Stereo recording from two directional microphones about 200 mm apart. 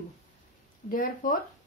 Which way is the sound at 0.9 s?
40° left (ahead or behind).